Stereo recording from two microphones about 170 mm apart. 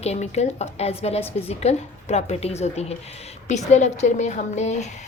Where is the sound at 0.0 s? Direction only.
40° left (ahead or behind).